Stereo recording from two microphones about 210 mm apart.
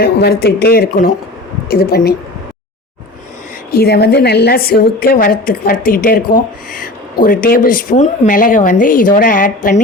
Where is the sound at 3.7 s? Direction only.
50° left (ahead or behind).